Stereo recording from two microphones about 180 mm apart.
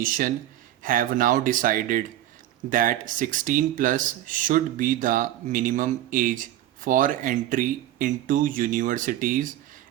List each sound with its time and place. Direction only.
0.0 s speech: 50° right (ahead or behind)